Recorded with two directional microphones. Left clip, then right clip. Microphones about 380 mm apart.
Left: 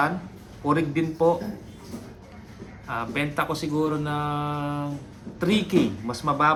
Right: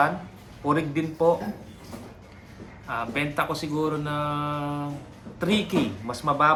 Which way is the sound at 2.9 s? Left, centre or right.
Centre.